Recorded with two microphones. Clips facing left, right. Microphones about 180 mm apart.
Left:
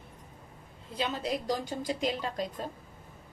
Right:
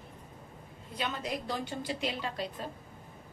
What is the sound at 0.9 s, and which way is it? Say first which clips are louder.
A woman's voice: left 3 dB; 30° left (ahead or behind).